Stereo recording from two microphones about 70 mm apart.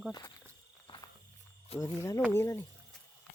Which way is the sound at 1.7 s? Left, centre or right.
Left.